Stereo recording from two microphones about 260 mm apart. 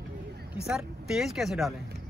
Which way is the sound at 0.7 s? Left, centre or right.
Centre.